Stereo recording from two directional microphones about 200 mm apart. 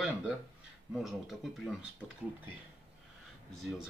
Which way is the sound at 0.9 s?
Centre (ahead or behind).